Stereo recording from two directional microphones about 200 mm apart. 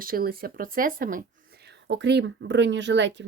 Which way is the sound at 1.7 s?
60° right (ahead or behind).